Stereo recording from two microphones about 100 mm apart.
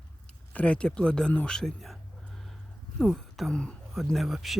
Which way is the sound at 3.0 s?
5° left (ahead or behind).